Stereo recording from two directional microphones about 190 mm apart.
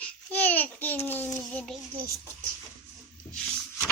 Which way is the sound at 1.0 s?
10° left (ahead or behind).